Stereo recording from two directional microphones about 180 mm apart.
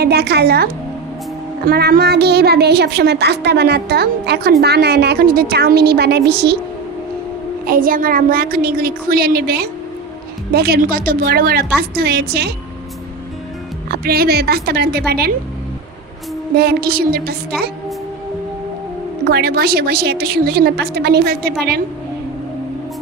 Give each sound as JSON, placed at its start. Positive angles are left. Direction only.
{"t": 0.0, "sound": "speech", "side_deg": -60}
{"t": 7.7, "sound": "speech", "side_deg": -50}
{"t": 13.8, "sound": "speech", "side_deg": -60}
{"t": 16.6, "sound": "speech", "side_deg": -60}
{"t": 19.2, "sound": "speech", "side_deg": -60}